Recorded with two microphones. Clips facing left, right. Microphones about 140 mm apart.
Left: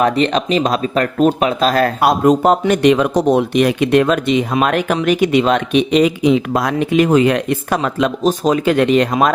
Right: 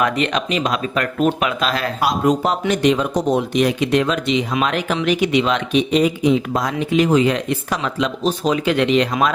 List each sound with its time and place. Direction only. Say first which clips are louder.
0.0 s speech: left 5 dB; 35° left (ahead or behind)
5.9 s speech: left 3 dB; 90° left; by 9.0 s 45° left (ahead or behind)